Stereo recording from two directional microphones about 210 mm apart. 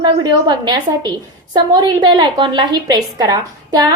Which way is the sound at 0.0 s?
20° right (ahead or behind).